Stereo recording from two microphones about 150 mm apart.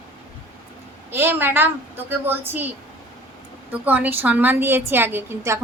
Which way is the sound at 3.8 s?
10° right (ahead or behind).